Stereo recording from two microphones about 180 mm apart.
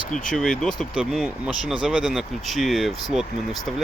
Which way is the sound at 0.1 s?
5° left (ahead or behind).